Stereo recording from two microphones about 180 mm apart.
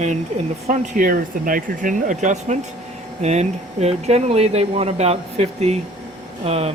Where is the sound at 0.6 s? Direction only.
40° right (ahead or behind).